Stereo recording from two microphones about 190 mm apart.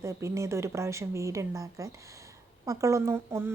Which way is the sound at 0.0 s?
15° right (ahead or behind).